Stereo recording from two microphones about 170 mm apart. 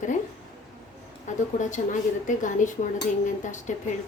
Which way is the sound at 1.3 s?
45° left (ahead or behind).